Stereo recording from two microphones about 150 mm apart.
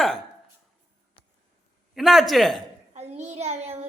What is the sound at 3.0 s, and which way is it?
Speech, 50° right (ahead or behind).